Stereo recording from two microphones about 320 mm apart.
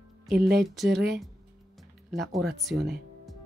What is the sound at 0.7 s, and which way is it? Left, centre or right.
Speech, centre.